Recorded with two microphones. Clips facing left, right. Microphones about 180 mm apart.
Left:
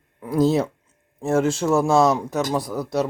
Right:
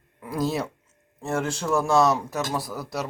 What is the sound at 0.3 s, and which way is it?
Speech, 25° left (ahead or behind).